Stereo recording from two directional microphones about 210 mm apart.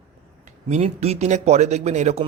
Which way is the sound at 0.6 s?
30° right (ahead or behind).